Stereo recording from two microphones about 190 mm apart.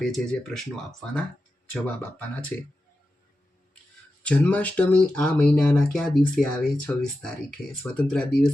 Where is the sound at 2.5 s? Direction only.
10° left (ahead or behind).